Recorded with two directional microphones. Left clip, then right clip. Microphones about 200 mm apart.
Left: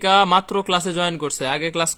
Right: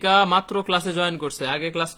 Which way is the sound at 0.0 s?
30° left (ahead or behind).